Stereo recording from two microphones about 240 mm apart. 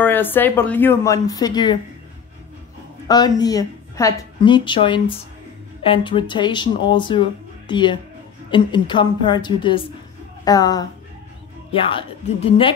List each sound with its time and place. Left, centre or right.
0.0 s speech: centre
3.1 s speech: centre
12.4 s speech: left